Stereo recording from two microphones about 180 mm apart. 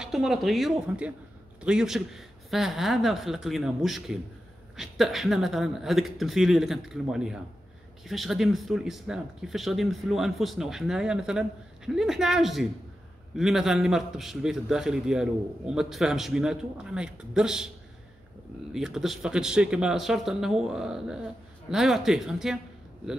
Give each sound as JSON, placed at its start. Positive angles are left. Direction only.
{"t": 0.0, "sound": "speech", "side_deg": 0}
{"t": 18.7, "sound": "speech", "side_deg": 0}